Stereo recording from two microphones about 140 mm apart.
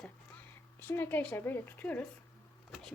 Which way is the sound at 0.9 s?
15° left (ahead or behind).